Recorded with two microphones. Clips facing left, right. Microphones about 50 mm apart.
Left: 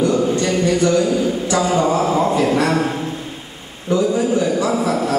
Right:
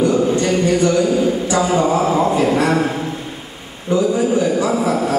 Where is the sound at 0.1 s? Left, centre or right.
Centre.